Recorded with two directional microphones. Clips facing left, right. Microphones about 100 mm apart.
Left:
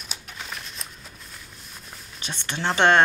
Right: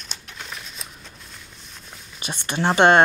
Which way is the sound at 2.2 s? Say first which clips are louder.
Right 5 dB; 15° right (ahead or behind).